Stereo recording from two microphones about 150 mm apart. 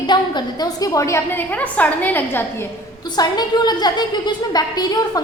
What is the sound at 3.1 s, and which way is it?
A woman's voice, 30° left (ahead or behind).